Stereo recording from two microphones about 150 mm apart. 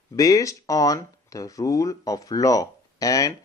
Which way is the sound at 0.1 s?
25° left (ahead or behind).